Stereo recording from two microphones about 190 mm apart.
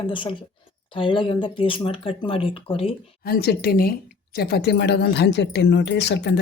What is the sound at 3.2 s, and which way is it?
Speech, 55° left (ahead or behind).